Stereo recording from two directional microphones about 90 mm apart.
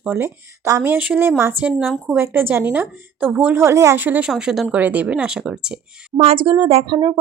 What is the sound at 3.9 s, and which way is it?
Speech, 20° right (ahead or behind).